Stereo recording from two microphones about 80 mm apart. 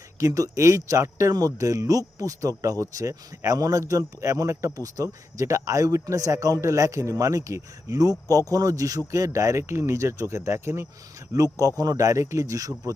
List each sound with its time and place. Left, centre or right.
0.2 s speech: right
11.6 s speech: right